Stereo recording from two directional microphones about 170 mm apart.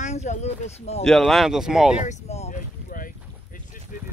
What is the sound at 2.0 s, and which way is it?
Boat, 40° left (ahead or behind).